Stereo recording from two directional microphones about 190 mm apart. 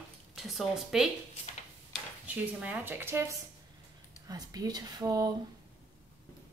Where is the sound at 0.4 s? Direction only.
Centre (ahead or behind); by 5.3 s 20° right (ahead or behind).